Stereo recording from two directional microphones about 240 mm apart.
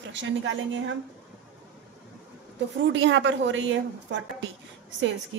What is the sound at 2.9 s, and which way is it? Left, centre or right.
A woman's voice, right.